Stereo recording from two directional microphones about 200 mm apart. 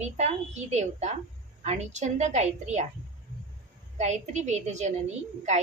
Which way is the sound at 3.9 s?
35° right (ahead or behind).